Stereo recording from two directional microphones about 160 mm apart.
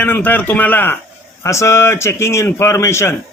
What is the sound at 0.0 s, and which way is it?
Speech, 10° left (ahead or behind).